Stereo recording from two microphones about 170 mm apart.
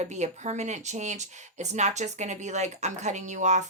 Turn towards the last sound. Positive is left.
turn(degrees=-45)  # may be behind; listen again after turning